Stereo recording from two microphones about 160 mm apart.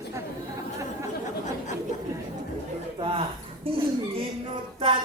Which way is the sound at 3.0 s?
35° right (ahead or behind).